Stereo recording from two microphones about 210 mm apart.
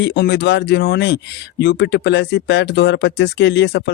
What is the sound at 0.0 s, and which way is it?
Speech, 50° left (ahead or behind).